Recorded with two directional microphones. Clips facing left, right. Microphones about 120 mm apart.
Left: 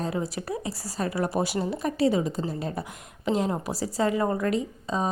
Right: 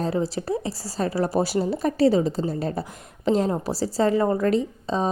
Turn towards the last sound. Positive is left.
turn(degrees=-30)  # may be behind; listen again after turning